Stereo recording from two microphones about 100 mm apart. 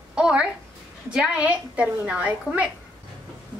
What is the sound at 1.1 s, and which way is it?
A woman's voice, 10° right (ahead or behind).